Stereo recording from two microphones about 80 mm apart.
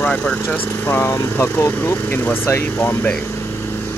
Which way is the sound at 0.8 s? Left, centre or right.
Left.